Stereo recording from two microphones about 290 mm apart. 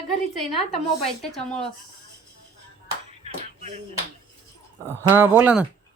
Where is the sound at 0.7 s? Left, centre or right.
Centre.